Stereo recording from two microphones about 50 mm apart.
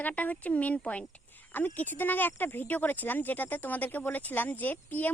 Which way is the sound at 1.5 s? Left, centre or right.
Left.